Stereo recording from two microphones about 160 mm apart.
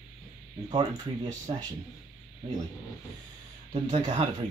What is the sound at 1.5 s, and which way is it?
Speech, 30° right (ahead or behind).